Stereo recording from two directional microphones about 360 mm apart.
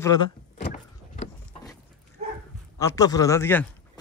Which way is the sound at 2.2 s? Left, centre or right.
Centre.